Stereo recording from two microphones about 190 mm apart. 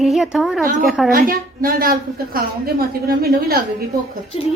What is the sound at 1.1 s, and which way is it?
A woman's voice, 50° right (ahead or behind).